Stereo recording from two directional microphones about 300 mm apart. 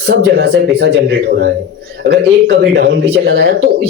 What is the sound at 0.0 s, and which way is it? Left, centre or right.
A man's voice, right.